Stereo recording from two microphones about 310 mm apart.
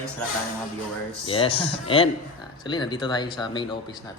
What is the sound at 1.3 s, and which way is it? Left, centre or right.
Speech, centre.